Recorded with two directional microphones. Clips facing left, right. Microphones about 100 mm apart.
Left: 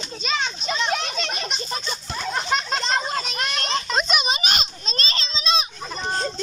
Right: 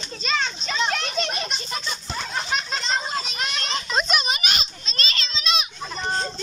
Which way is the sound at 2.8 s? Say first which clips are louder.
Left 2 dB; 50° left (ahead or behind).